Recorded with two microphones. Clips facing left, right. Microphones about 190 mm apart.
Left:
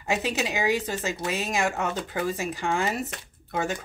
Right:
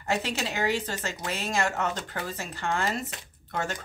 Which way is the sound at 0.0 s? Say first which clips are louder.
Left 2 dB; 15° left (ahead or behind).